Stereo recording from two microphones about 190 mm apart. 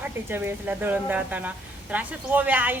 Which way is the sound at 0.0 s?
10° right (ahead or behind).